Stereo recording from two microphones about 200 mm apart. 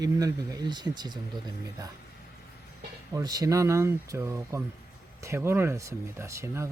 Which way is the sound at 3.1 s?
20° right (ahead or behind).